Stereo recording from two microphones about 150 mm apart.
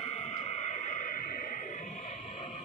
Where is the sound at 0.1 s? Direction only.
50° left (ahead or behind).